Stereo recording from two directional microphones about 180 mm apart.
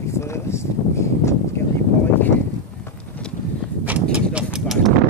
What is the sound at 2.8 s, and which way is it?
Vehicle, 10° left (ahead or behind).